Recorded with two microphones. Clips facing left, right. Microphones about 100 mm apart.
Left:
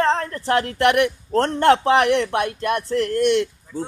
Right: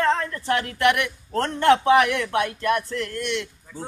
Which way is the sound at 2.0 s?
30° left (ahead or behind).